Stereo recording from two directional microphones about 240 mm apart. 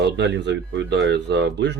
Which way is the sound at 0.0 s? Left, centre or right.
Right.